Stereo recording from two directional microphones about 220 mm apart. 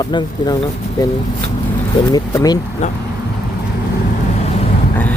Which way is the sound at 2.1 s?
15° left (ahead or behind).